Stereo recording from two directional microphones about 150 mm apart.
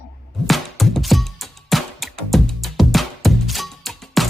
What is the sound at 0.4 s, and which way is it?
Music, centre (ahead or behind).